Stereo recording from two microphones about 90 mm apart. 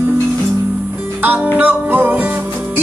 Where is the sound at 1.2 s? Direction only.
15° right (ahead or behind).